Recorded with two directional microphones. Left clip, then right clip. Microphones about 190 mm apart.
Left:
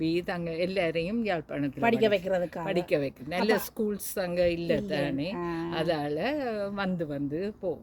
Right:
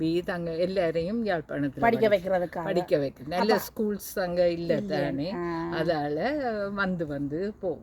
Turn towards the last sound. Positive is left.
turn(degrees=5)  # may be behind; listen again after turning